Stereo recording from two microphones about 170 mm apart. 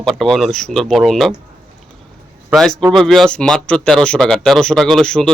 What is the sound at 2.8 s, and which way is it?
Speech, centre (ahead or behind).